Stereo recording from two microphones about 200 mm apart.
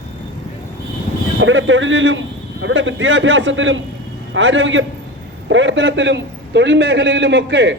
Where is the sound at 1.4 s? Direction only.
75° right (ahead or behind).